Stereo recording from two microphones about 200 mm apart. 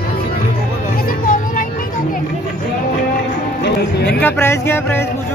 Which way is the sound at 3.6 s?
55° left (ahead or behind).